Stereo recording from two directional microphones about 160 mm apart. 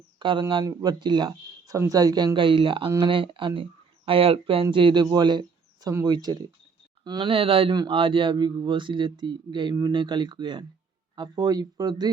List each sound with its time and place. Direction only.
0.2 s speech: 30° right (ahead or behind)